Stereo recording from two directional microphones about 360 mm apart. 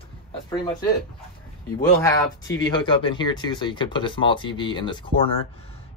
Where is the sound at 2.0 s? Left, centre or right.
Centre.